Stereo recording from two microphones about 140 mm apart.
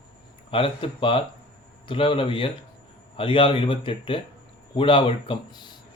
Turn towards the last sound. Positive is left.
turn(degrees=40)  # may be behind; listen again after turning